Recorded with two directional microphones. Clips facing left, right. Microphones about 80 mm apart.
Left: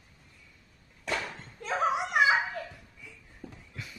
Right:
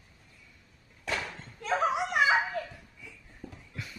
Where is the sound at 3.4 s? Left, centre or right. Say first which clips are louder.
Even; centre.